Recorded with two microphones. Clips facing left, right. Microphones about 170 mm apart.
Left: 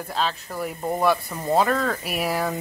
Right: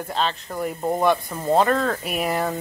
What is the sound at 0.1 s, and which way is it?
Speech, centre (ahead or behind).